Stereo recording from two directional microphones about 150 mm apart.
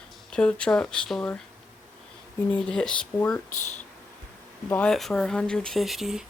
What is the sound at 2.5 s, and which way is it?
Speech, 5° left (ahead or behind).